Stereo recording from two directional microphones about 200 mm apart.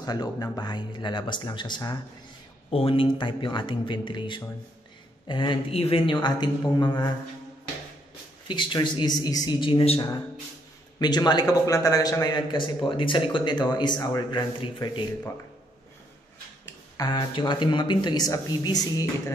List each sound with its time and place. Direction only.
0.0 s a man's voice: 20° left (ahead or behind)
8.5 s a man's voice: 25° left (ahead or behind)
16.9 s a man's voice: 20° left (ahead or behind)